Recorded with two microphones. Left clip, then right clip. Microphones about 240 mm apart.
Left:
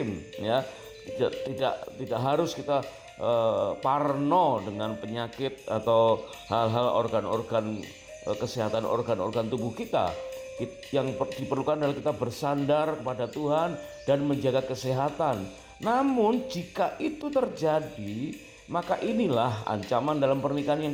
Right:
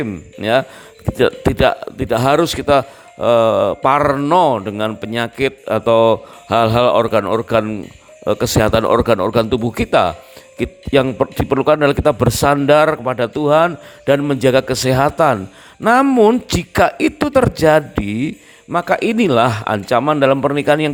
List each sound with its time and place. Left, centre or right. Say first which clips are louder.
1.2 s a man's voice: right 14 dB; right